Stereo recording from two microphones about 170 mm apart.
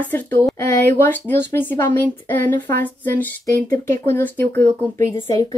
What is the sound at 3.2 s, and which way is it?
A woman's voice, 20° left (ahead or behind).